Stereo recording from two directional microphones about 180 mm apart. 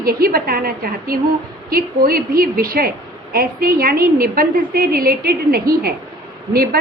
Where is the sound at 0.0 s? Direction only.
55° right (ahead or behind).